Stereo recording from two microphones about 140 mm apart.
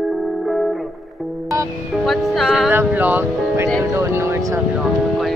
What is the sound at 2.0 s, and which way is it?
Speech, centre (ahead or behind).